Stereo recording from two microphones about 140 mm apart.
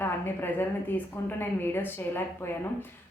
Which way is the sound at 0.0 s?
15° left (ahead or behind).